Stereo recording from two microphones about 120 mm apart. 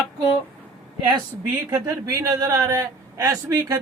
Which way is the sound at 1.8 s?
30° right (ahead or behind).